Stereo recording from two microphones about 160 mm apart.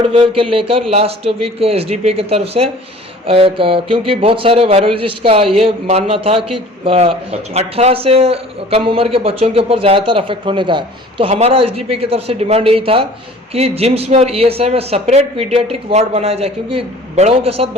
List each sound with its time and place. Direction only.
0.1 s a man's voice: 35° right (ahead or behind)